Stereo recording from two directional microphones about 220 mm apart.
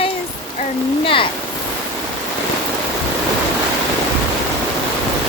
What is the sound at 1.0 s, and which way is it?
Speech, 25° left (ahead or behind).